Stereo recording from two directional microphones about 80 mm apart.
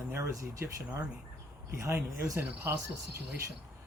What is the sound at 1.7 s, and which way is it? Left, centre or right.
Speech, right.